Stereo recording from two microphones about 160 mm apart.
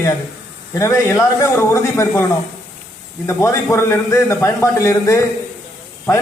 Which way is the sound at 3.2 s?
15° left (ahead or behind).